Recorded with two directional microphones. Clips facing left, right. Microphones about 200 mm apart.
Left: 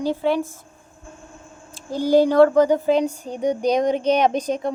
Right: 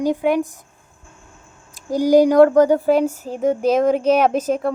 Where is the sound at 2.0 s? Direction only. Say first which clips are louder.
Right 3 dB; 15° right (ahead or behind).